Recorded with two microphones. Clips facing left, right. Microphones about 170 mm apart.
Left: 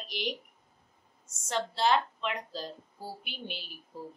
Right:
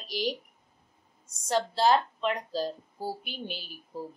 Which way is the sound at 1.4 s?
40° right (ahead or behind).